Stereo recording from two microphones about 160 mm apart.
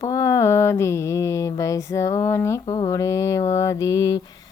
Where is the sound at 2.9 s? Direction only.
20° left (ahead or behind).